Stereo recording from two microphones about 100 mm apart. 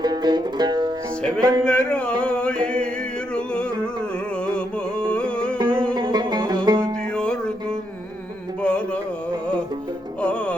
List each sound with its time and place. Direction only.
0.0 s music: 45° right (ahead or behind)
1.4 s speech: 45° right (ahead or behind)
1.6 s music: 10° left (ahead or behind)
4.4 s carnatic music: 10° left (ahead or behind)
5.6 s music: 10° left (ahead or behind)
5.9 s music: 45° right (ahead or behind)
7.2 s music: 10° left (ahead or behind)
10.2 s music: 10° left (ahead or behind)